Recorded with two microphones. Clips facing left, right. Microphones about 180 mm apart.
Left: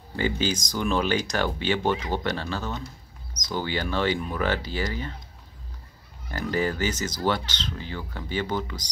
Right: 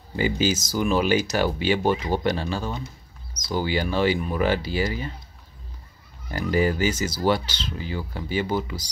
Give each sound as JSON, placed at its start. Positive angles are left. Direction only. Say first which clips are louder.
{"t": 0.1, "sound": "speech", "louder": "right 3 dB", "side_deg": -10}
{"t": 6.5, "sound": "speech", "louder": "right 4 dB", "side_deg": -10}